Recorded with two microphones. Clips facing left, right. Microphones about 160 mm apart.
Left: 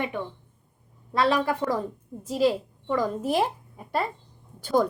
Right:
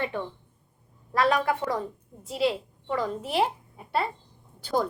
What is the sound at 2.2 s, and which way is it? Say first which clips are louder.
A woman's voice: left 3 dB; 40° left (ahead or behind).